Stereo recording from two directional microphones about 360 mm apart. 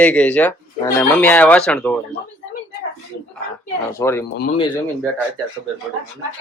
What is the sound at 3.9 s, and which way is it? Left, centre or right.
Speech, centre.